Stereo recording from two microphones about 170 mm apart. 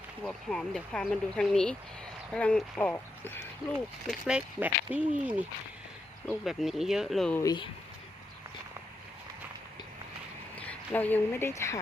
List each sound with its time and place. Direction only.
0.2 s speech: 5° left (ahead or behind)
4.1 s speech: 5° right (ahead or behind)
7.3 s speech: 25° left (ahead or behind)
10.7 s a woman's voice: 10° left (ahead or behind)